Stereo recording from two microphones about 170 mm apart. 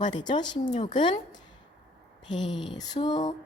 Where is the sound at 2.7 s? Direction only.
25° left (ahead or behind).